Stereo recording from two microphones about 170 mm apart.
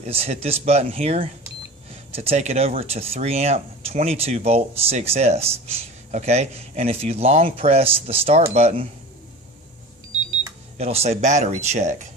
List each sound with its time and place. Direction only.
0.0 s speech: 35° right (ahead or behind)
10.8 s speech: 35° right (ahead or behind)